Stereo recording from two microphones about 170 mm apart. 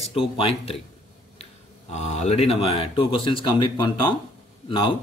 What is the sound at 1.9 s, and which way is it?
Speech, 40° left (ahead or behind).